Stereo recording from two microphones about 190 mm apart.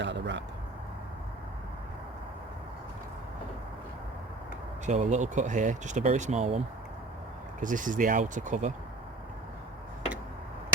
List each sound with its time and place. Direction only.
0.0 s speech: 70° right (ahead or behind)
4.9 s speech: 40° right (ahead or behind)
7.6 s speech: 45° right (ahead or behind)